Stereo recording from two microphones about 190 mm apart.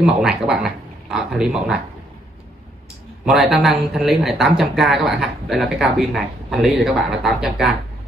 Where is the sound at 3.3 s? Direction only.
Centre (ahead or behind).